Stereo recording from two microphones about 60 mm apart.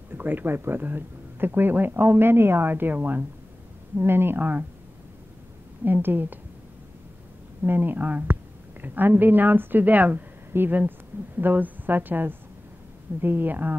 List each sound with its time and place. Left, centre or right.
0.1 s a woman's voice: right
5.9 s a woman's voice: right
7.6 s a woman's voice: right